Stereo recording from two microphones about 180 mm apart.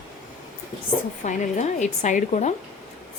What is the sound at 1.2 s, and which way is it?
Speech, 45° left (ahead or behind).